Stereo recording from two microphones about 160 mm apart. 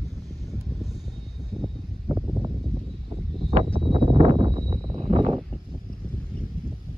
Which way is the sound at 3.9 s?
35° right (ahead or behind).